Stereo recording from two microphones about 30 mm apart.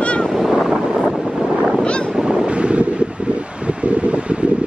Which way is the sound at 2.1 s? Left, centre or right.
Right.